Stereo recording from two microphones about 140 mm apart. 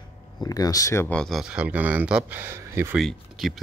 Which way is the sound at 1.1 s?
Centre (ahead or behind).